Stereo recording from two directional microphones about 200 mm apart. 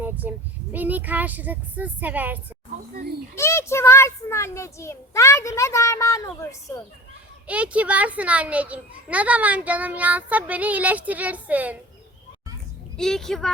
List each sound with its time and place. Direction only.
0.0 s a child's voice: 10° right (ahead or behind)
3.3 s a child's voice: 15° left (ahead or behind)
7.4 s a child's voice: 5° right (ahead or behind)
13.0 s a woman's voice: centre (ahead or behind)